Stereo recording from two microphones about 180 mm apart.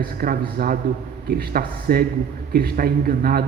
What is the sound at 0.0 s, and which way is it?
A man's voice, 55° right (ahead or behind).